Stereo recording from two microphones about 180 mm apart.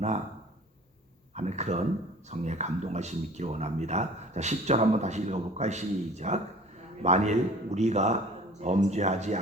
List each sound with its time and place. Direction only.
1.4 s speech: 40° right (ahead or behind)